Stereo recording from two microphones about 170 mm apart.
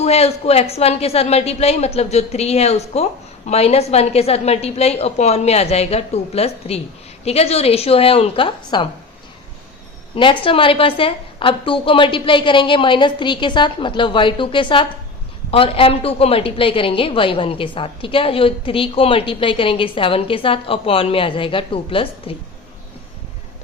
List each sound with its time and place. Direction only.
0.0 s a woman's voice: 40° left (ahead or behind)
10.2 s a woman's voice: 30° left (ahead or behind)